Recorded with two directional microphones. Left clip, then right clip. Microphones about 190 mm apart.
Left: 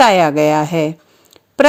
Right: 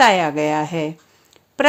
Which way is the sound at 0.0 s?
25° left (ahead or behind).